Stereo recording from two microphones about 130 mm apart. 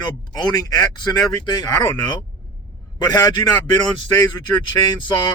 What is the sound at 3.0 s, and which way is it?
Speech, 30° left (ahead or behind).